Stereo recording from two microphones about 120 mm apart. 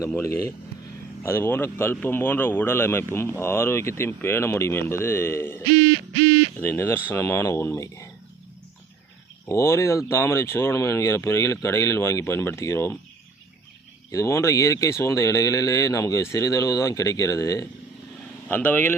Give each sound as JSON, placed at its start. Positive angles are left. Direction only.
{"t": 0.2, "sound": "speech", "side_deg": 25}
{"t": 9.5, "sound": "speech", "side_deg": 25}
{"t": 14.1, "sound": "speech", "side_deg": 25}
{"t": 18.5, "sound": "speech", "side_deg": 15}